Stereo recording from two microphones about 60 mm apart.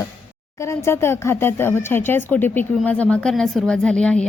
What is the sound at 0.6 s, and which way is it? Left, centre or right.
A woman's voice, left.